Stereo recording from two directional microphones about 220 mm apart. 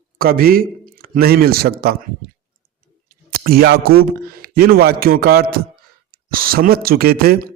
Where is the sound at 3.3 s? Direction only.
45° right (ahead or behind).